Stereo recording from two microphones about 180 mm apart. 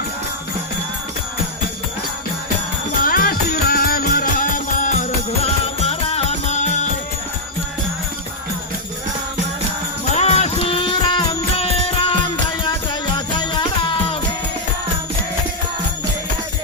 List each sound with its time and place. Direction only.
3.0 s music: 50° left (ahead or behind)
10.2 s music: 35° left (ahead or behind)